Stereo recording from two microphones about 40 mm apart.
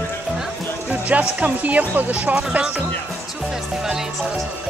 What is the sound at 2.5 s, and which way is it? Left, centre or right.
Speech, right.